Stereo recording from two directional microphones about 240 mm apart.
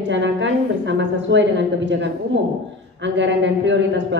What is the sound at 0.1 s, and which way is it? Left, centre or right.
A woman's voice, right.